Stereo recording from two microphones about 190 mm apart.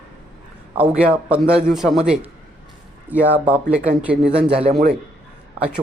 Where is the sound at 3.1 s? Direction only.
10° right (ahead or behind).